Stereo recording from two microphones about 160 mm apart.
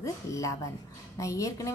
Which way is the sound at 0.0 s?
20° left (ahead or behind).